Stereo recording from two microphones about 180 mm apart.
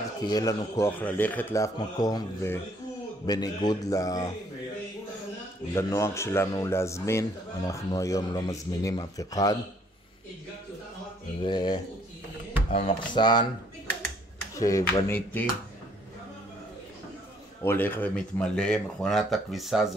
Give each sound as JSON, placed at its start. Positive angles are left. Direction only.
{"t": 0.3, "sound": "speech", "side_deg": 20}
{"t": 5.8, "sound": "speech", "side_deg": 15}
{"t": 11.4, "sound": "speech", "side_deg": 25}
{"t": 14.6, "sound": "speech", "side_deg": 15}
{"t": 17.6, "sound": "speech", "side_deg": 10}